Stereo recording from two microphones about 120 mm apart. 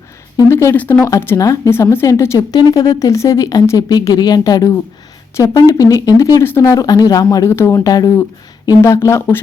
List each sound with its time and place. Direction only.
0.3 s speech: 25° left (ahead or behind)
2.6 s speech: 35° left (ahead or behind)